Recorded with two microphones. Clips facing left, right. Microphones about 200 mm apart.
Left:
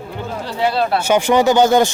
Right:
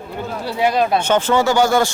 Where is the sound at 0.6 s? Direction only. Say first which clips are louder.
Right 1 dB; 15° right (ahead or behind).